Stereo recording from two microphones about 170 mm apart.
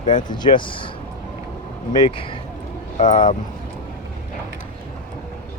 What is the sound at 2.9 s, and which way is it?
Speech, 45° left (ahead or behind).